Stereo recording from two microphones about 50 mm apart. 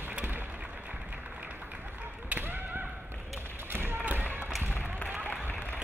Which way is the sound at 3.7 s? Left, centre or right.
Right.